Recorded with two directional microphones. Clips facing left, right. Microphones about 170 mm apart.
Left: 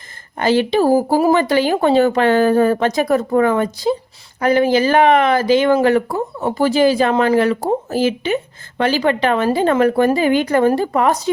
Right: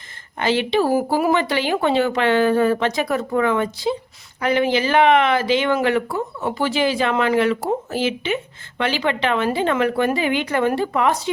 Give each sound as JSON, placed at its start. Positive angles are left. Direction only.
{"t": 0.3, "sound": "speech", "side_deg": 40}